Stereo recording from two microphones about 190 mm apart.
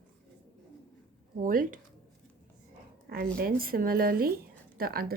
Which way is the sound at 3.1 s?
50° right (ahead or behind).